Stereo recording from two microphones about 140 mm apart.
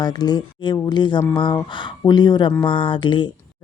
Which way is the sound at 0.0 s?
30° left (ahead or behind).